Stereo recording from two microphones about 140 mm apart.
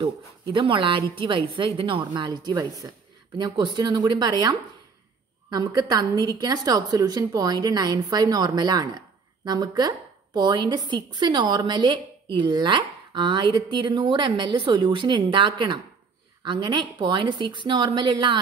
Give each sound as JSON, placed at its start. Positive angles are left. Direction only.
{"t": 0.0, "sound": "a woman's voice", "side_deg": -40}